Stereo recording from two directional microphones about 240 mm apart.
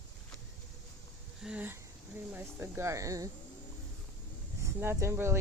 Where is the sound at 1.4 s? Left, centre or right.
Centre.